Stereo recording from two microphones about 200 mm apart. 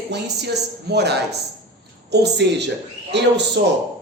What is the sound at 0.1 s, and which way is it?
A man's voice, 55° right (ahead or behind).